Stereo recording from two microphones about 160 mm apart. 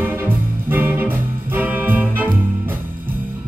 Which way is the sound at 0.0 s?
15° right (ahead or behind).